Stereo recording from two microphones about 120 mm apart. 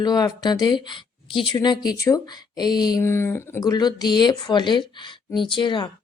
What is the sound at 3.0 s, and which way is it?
Speech, 20° left (ahead or behind).